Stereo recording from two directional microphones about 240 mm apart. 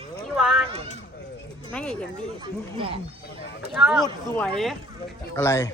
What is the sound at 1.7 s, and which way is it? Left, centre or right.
Speech, centre.